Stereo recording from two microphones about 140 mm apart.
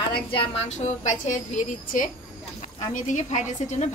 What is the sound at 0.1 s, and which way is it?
A woman's voice, 35° left (ahead or behind).